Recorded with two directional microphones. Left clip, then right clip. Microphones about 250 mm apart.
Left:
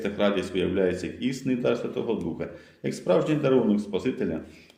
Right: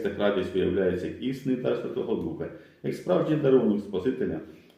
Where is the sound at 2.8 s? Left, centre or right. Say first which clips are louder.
Left 2 dB; left.